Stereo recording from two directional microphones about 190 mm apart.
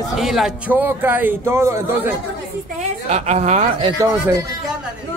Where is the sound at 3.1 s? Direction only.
35° right (ahead or behind).